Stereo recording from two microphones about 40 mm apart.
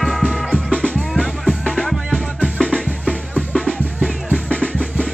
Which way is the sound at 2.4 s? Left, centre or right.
Left.